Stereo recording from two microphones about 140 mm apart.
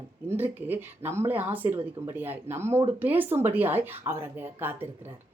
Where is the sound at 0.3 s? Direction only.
15° right (ahead or behind).